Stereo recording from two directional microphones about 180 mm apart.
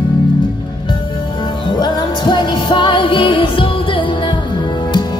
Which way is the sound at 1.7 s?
25° left (ahead or behind).